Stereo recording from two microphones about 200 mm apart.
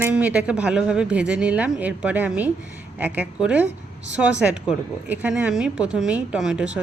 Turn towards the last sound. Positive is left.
turn(degrees=-5)  # may be behind; listen again after turning